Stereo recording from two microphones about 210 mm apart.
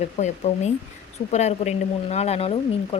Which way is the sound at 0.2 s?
35° left (ahead or behind).